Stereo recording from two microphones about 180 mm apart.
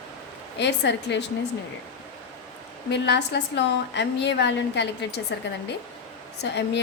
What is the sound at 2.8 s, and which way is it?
A woman's voice, 70° left (ahead or behind).